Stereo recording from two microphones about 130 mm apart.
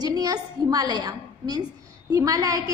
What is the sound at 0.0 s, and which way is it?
A woman's voice, 30° right (ahead or behind).